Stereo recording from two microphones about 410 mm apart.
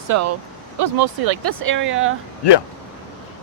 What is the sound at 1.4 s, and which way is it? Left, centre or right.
Speech, right.